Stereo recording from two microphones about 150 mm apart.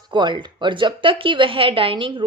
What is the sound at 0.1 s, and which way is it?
A woman's voice, 30° right (ahead or behind).